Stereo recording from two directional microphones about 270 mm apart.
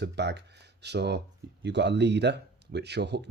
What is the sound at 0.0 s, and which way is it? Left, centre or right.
Speech, right.